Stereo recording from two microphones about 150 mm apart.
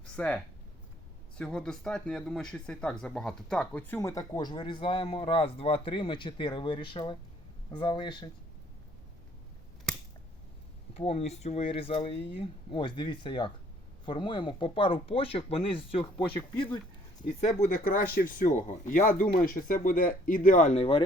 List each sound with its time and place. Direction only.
0.2 s speech: 10° left (ahead or behind)
1.4 s speech: 5° left (ahead or behind); by 8.3 s 30° left (ahead or behind)
10.9 s speech: 40° left (ahead or behind)
17.4 s speech: 55° left (ahead or behind)